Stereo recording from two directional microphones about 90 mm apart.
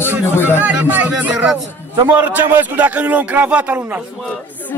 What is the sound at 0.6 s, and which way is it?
Speech, 20° right (ahead or behind).